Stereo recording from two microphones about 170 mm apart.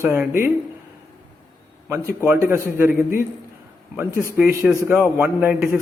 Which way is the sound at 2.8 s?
55° left (ahead or behind).